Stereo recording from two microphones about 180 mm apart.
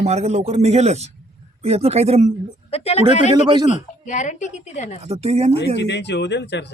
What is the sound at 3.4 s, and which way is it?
Speech, 25° right (ahead or behind).